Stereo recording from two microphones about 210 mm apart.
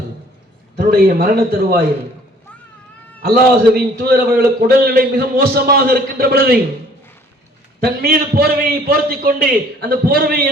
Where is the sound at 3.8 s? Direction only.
50° right (ahead or behind).